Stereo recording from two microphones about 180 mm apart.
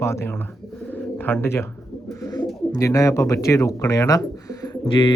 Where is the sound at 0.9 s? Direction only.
10° left (ahead or behind).